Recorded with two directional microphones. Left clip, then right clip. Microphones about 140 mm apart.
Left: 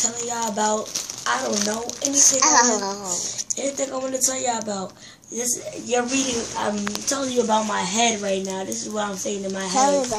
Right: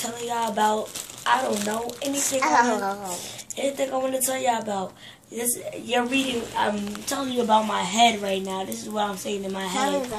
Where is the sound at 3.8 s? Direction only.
15° right (ahead or behind).